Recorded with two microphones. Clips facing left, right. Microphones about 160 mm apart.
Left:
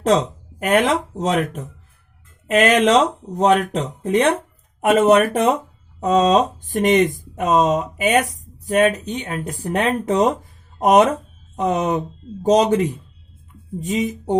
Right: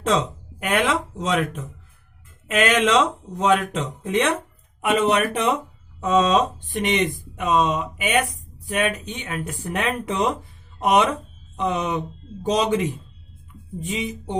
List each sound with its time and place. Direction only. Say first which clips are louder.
0.0 s speech: left 5 dB; 40° left (ahead or behind)